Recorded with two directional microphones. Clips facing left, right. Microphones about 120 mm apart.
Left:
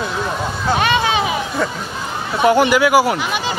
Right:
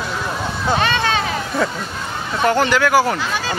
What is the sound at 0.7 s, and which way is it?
Speech, 10° left (ahead or behind).